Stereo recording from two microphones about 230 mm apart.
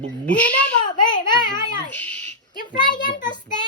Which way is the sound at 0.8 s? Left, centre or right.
Centre.